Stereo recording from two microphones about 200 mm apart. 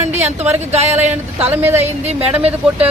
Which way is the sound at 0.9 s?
10° right (ahead or behind).